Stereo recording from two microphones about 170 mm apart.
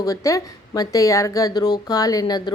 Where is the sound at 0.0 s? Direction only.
20° left (ahead or behind).